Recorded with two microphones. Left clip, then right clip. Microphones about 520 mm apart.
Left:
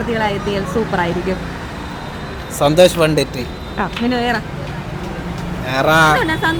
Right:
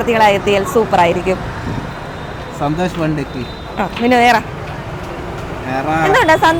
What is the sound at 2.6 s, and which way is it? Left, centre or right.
Speech, centre.